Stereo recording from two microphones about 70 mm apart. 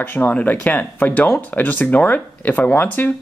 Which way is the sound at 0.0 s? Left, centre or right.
Left.